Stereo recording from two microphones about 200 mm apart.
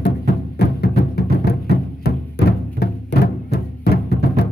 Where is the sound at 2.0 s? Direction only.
55° left (ahead or behind).